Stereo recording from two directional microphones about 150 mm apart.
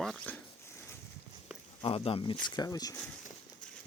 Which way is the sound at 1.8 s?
35° left (ahead or behind).